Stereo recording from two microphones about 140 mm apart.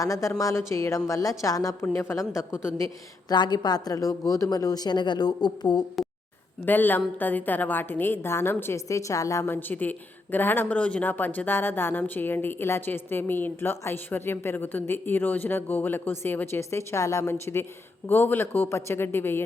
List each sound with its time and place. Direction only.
0.0 s speech: 25° left (ahead or behind)
6.7 s speech: 15° left (ahead or behind)